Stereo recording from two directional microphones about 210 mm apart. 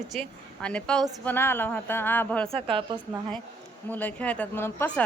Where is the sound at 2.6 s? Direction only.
25° right (ahead or behind).